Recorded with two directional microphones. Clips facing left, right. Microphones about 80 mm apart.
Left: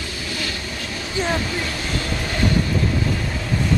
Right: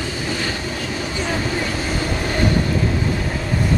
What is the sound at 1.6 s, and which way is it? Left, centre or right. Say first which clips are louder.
Train: right 3 dB; centre.